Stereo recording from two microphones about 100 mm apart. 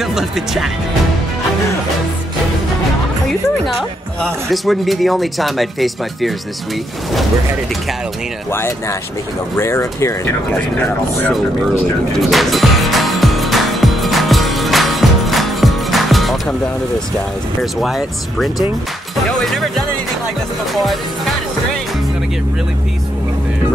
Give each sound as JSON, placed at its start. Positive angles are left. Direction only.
{"t": 0.0, "sound": "speech", "side_deg": -5}
{"t": 4.2, "sound": "a man's voice", "side_deg": 0}
{"t": 9.6, "sound": "speech", "side_deg": 25}
{"t": 12.2, "sound": "music", "side_deg": 0}
{"t": 17.6, "sound": "a man's voice", "side_deg": 0}
{"t": 19.3, "sound": "music", "side_deg": 0}
{"t": 20.7, "sound": "music", "side_deg": 0}